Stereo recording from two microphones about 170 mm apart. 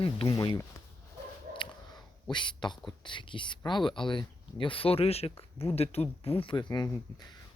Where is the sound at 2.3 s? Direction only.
25° left (ahead or behind).